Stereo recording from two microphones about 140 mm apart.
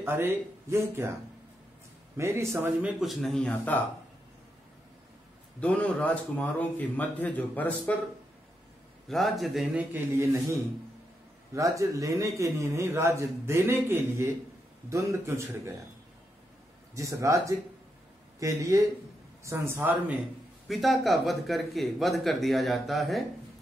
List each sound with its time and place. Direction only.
0.0 s speech: 15° right (ahead or behind)
2.1 s a man's voice: 20° right (ahead or behind)
3.0 s speech: centre (ahead or behind)
5.6 s speech: 10° left (ahead or behind)
9.1 s speech: centre (ahead or behind)
9.9 s a man's voice: 20° right (ahead or behind)
16.9 s a man's voice: 20° right (ahead or behind)
20.6 s speech: centre (ahead or behind)